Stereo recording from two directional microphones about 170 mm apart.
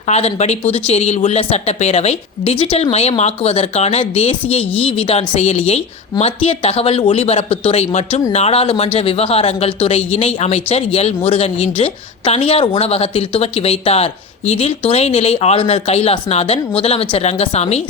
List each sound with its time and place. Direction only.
0.1 s speech: 40° left (ahead or behind)